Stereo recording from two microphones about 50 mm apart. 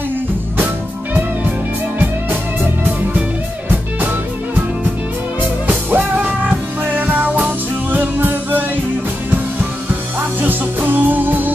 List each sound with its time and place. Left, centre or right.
5.9 s music: right
10.4 s music: right